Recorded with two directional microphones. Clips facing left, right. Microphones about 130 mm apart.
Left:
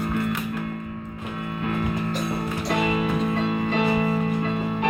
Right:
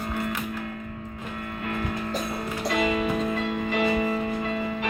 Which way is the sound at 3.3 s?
60° left (ahead or behind).